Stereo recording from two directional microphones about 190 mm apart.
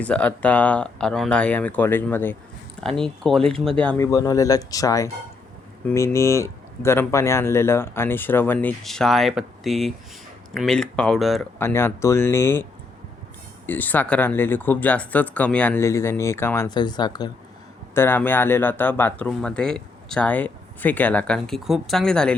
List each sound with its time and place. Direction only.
0.0 s speech: 5° left (ahead or behind)
11.6 s speech: 10° left (ahead or behind)
13.7 s speech: 10° left (ahead or behind)
17.9 s speech: 10° left (ahead or behind)